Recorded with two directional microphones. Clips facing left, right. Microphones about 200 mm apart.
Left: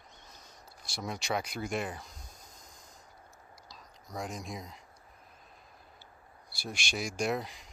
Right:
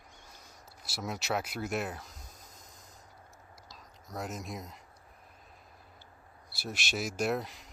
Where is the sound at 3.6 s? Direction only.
Centre (ahead or behind).